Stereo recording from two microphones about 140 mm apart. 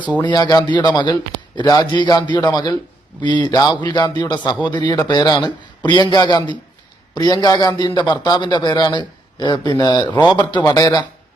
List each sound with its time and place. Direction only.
0.2 s a man's voice: 30° left (ahead or behind)